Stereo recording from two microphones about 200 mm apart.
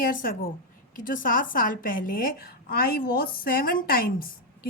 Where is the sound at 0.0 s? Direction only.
45° left (ahead or behind).